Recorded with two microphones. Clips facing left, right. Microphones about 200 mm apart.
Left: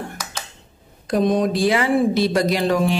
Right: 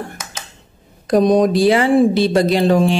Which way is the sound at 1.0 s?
40° right (ahead or behind).